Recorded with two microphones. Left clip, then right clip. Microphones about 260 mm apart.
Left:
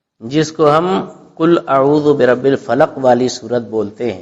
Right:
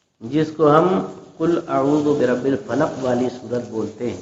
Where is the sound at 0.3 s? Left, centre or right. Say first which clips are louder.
Left 4 dB; left.